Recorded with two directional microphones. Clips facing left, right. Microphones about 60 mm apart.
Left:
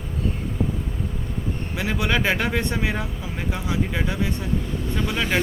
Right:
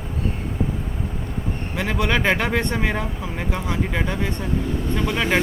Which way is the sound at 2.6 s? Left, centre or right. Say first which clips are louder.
Right 2 dB; right.